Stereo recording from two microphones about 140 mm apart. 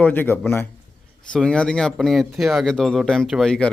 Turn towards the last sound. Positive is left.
turn(degrees=5)  # may be behind; listen again after turning